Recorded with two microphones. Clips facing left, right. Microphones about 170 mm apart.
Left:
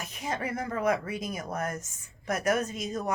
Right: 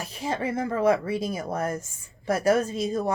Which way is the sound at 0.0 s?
30° right (ahead or behind).